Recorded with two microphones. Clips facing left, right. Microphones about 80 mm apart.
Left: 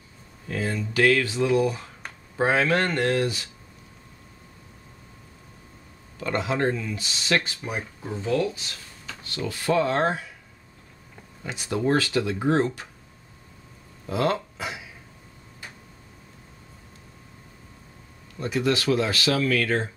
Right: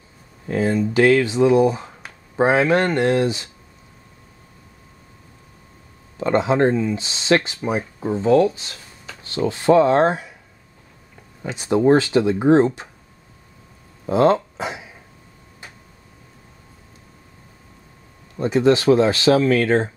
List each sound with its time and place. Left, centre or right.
0.5 s speech: right
6.1 s speech: right
11.4 s speech: right
14.0 s speech: right
18.3 s speech: right